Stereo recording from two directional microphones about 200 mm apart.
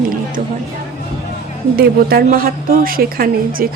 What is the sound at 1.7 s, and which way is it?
A woman's voice, 45° right (ahead or behind).